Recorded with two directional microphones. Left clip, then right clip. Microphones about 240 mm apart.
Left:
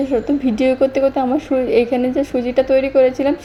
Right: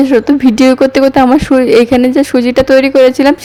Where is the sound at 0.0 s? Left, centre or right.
Right.